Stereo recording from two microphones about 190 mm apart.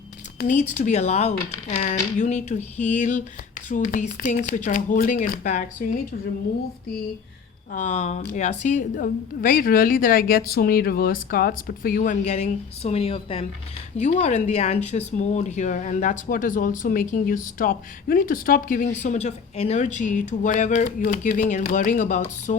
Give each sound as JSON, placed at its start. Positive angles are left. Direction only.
{"t": 0.3, "sound": "a woman's voice", "side_deg": 40}
{"t": 7.7, "sound": "a woman's voice", "side_deg": 40}